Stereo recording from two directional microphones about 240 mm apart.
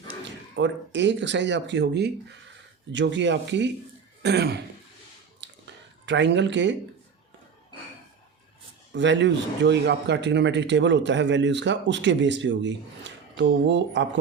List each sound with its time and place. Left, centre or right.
0.5 s a man's voice: right
5.6 s a sound: right
8.9 s a man's voice: right